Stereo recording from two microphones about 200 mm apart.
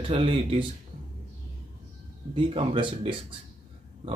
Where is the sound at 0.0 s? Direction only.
25° right (ahead or behind).